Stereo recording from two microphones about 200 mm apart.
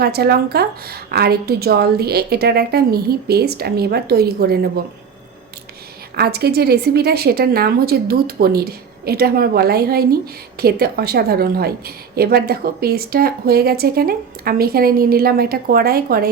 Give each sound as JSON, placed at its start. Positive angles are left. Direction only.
{"t": 0.0, "sound": "a woman's voice", "side_deg": -55}
{"t": 6.1, "sound": "a woman's voice", "side_deg": -50}